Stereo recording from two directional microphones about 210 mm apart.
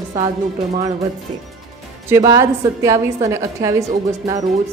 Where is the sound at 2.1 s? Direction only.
15° right (ahead or behind).